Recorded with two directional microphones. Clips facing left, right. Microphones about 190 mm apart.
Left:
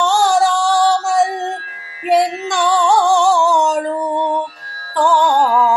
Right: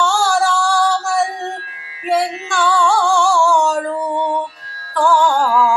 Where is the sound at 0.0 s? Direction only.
20° left (ahead or behind).